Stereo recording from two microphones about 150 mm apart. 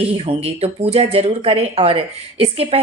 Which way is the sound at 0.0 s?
40° right (ahead or behind).